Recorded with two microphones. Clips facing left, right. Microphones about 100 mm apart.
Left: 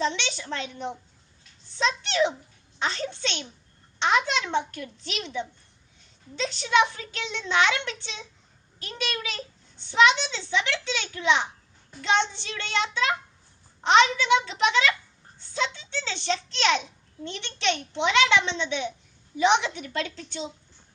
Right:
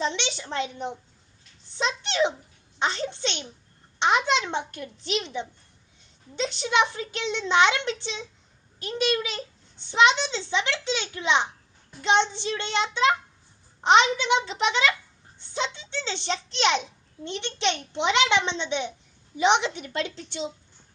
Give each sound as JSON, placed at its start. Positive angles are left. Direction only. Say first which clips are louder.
{"t": 0.0, "sound": "a child's voice", "louder": "left 1 dB", "side_deg": -20}
{"t": 1.8, "sound": "a child's voice", "louder": "left 1 dB", "side_deg": -20}